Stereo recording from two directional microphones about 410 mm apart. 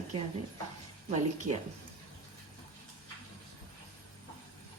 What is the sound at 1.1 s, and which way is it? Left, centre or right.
Speech, centre.